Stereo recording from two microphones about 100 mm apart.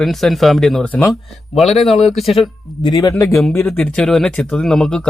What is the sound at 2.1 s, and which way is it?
Speech, centre (ahead or behind).